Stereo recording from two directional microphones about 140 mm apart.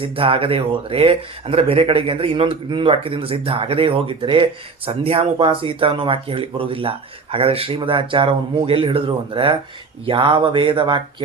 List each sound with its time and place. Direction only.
0.0 s speech: 40° right (ahead or behind)